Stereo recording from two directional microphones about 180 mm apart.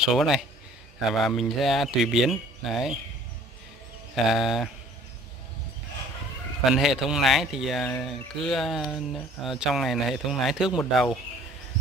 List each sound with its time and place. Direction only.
0.0 s speech: centre (ahead or behind)
4.1 s speech: centre (ahead or behind)
6.6 s speech: centre (ahead or behind)